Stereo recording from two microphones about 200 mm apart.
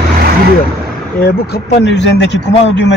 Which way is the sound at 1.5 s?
60° left (ahead or behind).